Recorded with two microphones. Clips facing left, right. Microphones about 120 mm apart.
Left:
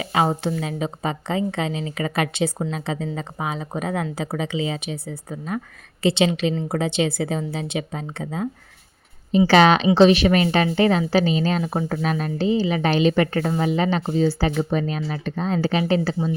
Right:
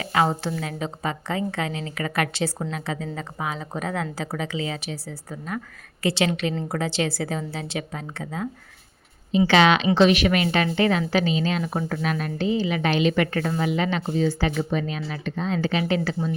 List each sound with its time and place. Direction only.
0.0 s a woman's voice: 20° left (ahead or behind)
9.5 s speech: 40° left (ahead or behind)